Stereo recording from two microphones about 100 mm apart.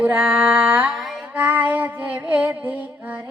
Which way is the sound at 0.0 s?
15° right (ahead or behind).